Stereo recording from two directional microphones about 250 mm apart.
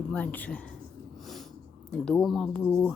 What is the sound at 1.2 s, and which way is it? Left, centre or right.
Snort, centre.